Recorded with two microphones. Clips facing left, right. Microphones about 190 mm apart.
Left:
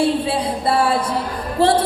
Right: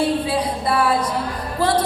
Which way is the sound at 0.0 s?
30° left (ahead or behind).